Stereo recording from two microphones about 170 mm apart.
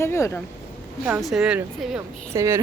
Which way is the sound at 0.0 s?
15° left (ahead or behind).